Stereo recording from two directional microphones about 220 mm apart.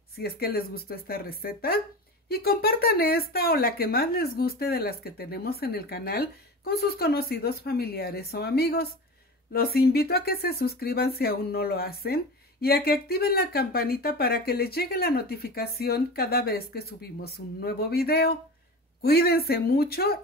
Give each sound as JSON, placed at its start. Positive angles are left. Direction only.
{"t": 0.2, "sound": "speech", "side_deg": 45}